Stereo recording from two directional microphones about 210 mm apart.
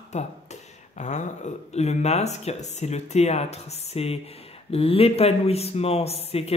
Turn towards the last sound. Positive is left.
turn(degrees=30)  # may be behind; listen again after turning